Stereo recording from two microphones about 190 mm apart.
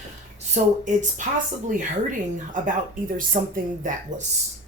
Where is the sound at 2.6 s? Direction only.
45° right (ahead or behind).